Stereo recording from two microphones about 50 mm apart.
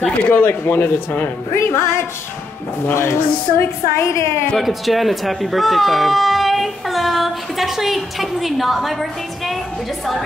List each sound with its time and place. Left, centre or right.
0.3 s speech: left
1.5 s a woman's voice: left
4.6 s speech: centre